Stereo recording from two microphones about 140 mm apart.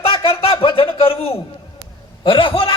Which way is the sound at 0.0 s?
40° left (ahead or behind).